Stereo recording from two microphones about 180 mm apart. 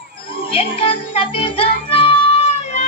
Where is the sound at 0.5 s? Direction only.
30° left (ahead or behind).